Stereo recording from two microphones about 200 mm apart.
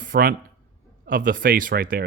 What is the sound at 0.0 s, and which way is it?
Speech, 45° right (ahead or behind).